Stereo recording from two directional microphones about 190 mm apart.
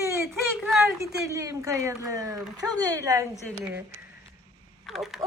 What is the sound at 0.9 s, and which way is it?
Speech, 15° right (ahead or behind).